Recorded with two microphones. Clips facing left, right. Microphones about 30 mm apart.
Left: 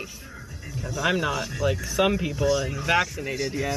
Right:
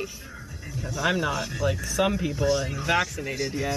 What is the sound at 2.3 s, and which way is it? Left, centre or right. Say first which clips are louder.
Speech: left 1 dB; centre.